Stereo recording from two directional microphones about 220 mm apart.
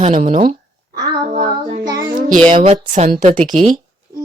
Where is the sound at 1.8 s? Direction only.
20° right (ahead or behind).